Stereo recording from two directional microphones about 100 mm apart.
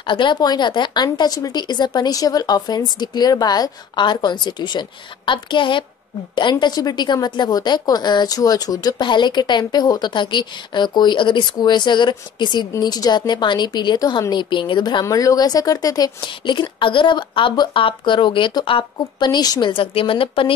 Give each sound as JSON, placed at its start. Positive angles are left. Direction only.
{"t": 0.0, "sound": "a woman's voice", "side_deg": 55}
{"t": 6.6, "sound": "a woman's voice", "side_deg": 40}
{"t": 15.0, "sound": "a woman's voice", "side_deg": 35}
{"t": 19.7, "sound": "speech", "side_deg": 65}